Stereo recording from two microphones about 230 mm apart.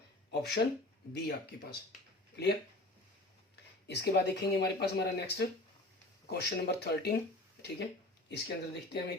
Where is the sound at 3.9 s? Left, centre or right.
Left.